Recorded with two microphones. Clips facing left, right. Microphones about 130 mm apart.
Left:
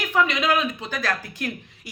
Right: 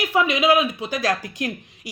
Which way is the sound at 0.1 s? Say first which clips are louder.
Right 3 dB; 10° right (ahead or behind).